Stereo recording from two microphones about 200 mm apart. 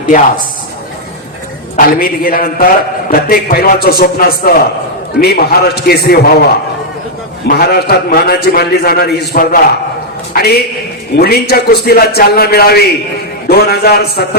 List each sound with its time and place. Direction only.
1.7 s a man's voice: 45° left (ahead or behind)